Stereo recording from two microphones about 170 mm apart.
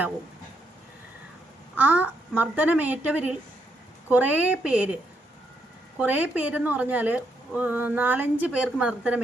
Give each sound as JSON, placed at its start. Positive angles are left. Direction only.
{"t": 1.7, "sound": "a woman's voice", "side_deg": -10}
{"t": 6.0, "sound": "a woman's voice", "side_deg": -10}